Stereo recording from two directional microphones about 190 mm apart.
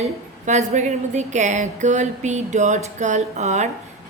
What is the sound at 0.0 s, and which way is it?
A woman's voice, 40° right (ahead or behind).